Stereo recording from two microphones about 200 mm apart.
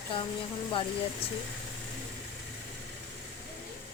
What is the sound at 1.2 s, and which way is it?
Speech, 30° left (ahead or behind).